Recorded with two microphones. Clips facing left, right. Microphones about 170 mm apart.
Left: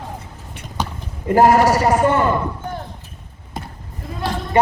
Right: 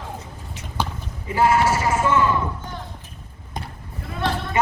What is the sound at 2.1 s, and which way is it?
Speech, 55° left (ahead or behind).